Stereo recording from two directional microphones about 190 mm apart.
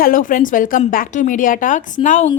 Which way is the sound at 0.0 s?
45° left (ahead or behind).